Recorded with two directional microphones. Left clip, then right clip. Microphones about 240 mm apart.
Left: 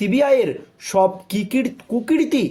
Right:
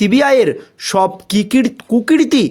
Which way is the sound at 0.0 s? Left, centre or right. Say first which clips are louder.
Right 5 dB; right.